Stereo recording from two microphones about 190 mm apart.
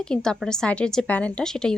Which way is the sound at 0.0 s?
5° left (ahead or behind).